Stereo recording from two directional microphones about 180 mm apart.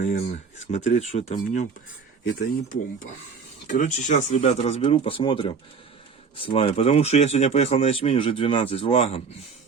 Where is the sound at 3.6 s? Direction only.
45° left (ahead or behind).